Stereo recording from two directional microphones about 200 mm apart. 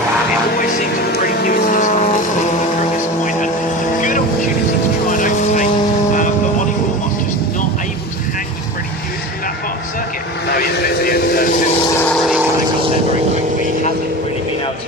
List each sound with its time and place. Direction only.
1.5 s vehicle: 45° left (ahead or behind)
5.1 s vehicle: 40° left (ahead or behind)
10.5 s vehicle: 50° left (ahead or behind)